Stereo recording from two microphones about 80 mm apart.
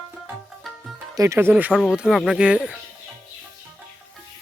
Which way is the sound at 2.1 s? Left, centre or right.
Centre.